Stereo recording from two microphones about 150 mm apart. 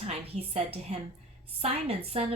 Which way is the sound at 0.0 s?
45° right (ahead or behind).